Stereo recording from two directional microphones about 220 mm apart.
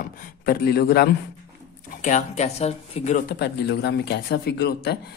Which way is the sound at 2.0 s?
30° left (ahead or behind).